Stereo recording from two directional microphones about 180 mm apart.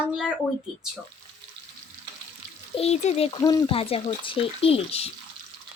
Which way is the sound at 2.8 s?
35° left (ahead or behind).